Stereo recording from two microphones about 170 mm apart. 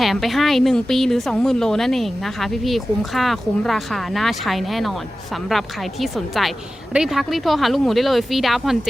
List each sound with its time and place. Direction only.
0.0 s a woman's voice: centre (ahead or behind)